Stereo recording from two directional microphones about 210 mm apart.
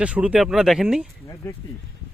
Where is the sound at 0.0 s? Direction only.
5° right (ahead or behind).